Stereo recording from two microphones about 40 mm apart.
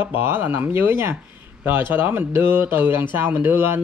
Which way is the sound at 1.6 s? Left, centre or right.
Right.